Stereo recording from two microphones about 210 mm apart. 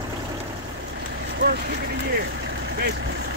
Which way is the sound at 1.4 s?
45° right (ahead or behind).